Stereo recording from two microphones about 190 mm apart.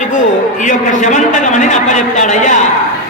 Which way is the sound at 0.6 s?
40° left (ahead or behind).